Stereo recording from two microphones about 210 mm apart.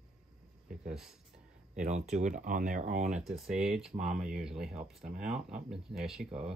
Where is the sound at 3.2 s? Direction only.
Centre (ahead or behind).